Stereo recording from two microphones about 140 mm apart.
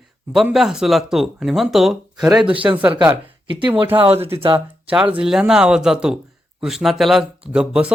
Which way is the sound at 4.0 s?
45° right (ahead or behind).